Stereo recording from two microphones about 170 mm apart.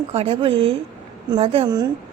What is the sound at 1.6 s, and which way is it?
Speech, 25° right (ahead or behind).